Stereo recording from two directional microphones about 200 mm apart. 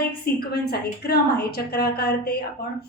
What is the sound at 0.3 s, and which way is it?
A woman's voice, 50° left (ahead or behind).